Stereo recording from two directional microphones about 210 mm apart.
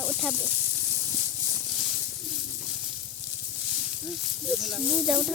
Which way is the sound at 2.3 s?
Centre (ahead or behind).